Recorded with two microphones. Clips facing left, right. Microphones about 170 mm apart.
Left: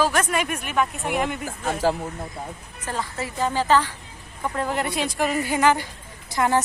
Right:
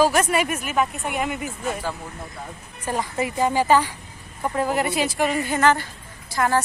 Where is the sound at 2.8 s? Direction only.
15° right (ahead or behind); by 6.6 s 20° left (ahead or behind).